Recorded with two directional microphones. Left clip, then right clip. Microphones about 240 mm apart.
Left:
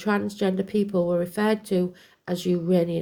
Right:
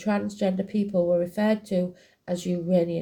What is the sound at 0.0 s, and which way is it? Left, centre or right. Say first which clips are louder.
Speech: left 2 dB; left.